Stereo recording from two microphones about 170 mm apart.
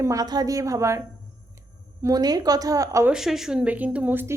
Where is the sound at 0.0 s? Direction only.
20° right (ahead or behind).